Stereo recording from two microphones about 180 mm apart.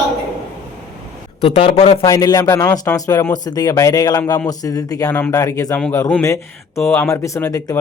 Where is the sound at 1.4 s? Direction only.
35° left (ahead or behind).